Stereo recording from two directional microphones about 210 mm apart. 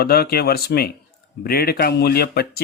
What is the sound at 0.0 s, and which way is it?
Speech, 45° left (ahead or behind).